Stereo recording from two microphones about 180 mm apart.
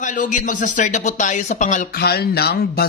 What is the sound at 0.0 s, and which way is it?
Speech, 45° left (ahead or behind).